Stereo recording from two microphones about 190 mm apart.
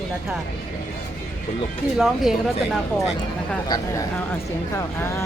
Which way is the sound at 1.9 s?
Centre (ahead or behind).